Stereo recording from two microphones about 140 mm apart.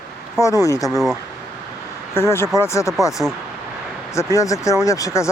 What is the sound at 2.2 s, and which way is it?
Vehicle, 20° left (ahead or behind).